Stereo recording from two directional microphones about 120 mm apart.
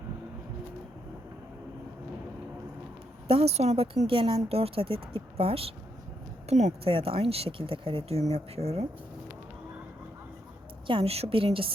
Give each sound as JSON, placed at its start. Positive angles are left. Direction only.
{"t": 3.2, "sound": "speech", "side_deg": -55}
{"t": 4.0, "sound": "speech", "side_deg": -50}
{"t": 6.5, "sound": "speech", "side_deg": -70}
{"t": 6.9, "sound": "speech", "side_deg": -50}
{"t": 10.8, "sound": "speech", "side_deg": -50}